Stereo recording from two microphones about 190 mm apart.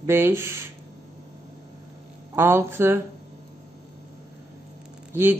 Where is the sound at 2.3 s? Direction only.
15° right (ahead or behind).